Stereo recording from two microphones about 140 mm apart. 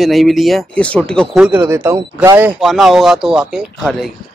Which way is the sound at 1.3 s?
10° right (ahead or behind).